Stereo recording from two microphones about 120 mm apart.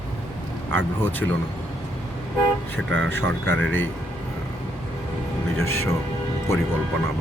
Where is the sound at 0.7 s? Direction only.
15° left (ahead or behind).